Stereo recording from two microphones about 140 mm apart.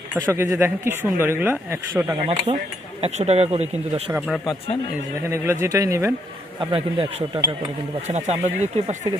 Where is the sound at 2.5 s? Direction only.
45° right (ahead or behind).